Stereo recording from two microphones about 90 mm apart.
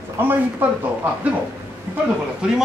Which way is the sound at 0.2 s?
25° right (ahead or behind).